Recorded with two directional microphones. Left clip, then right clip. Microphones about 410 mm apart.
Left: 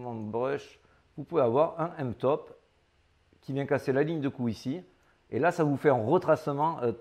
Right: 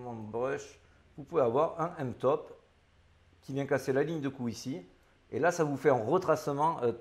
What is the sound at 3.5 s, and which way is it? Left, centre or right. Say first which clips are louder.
A man's voice: left 2 dB; left.